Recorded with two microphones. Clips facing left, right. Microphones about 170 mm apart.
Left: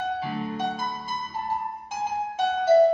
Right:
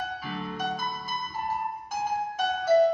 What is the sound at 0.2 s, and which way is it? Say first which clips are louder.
Music: left 5 dB; 25° left (ahead or behind).